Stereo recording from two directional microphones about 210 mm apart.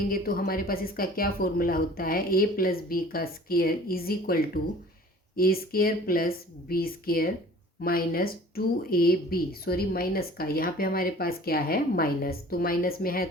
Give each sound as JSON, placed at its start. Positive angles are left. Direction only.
{"t": 0.1, "sound": "speech", "side_deg": 45}